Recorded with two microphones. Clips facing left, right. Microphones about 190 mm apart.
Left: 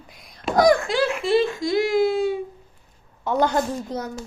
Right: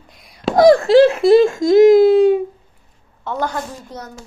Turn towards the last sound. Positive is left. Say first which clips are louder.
# left 2 dB
turn(degrees=15)  # may be behind; listen again after turning